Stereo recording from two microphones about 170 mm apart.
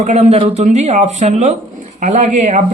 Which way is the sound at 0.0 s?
45° right (ahead or behind).